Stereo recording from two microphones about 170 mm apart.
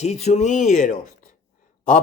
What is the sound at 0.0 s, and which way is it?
A man's voice, 40° left (ahead or behind).